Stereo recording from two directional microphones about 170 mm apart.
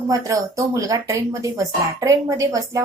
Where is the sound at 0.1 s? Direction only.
20° right (ahead or behind).